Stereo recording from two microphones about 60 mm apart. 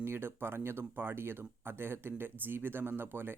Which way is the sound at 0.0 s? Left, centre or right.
Right.